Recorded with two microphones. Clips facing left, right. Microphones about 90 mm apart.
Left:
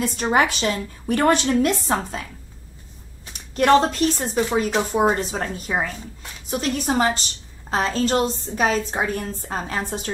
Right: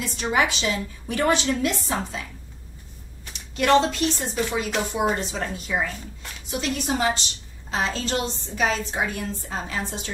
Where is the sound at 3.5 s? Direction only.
45° left (ahead or behind).